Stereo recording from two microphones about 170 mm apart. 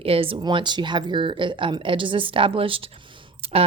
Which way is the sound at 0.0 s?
35° right (ahead or behind).